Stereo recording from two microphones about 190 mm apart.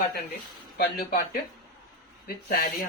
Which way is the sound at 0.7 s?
55° left (ahead or behind).